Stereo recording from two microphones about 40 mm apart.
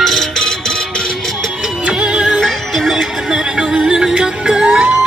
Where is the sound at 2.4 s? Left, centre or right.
Centre.